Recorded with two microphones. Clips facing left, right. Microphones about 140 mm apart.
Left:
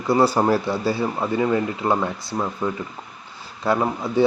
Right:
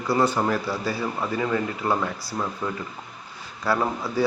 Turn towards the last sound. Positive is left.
turn(degrees=20)  # may be behind; listen again after turning